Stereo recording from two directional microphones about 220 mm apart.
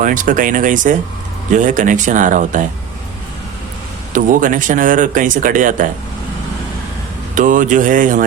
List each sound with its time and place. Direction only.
0.0 s speech: 35° right (ahead or behind)
4.1 s speech: 35° right (ahead or behind)
7.3 s speech: 35° right (ahead or behind)